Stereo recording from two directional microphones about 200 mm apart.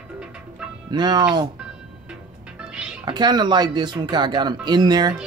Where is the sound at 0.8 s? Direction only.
20° right (ahead or behind).